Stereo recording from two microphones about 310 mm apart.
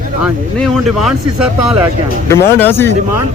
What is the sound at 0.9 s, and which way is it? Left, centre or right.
Speech, centre.